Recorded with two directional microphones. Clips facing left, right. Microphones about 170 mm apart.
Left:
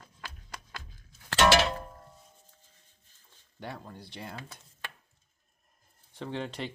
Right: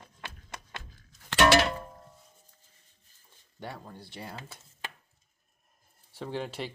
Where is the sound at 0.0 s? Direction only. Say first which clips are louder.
Right 1 dB; 25° right (ahead or behind).